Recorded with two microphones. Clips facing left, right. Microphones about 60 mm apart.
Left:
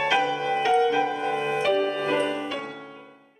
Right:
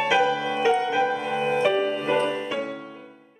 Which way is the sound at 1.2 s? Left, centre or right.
Right.